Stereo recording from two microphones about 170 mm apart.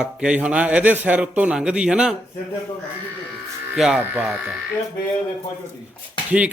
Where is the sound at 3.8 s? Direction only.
5° right (ahead or behind).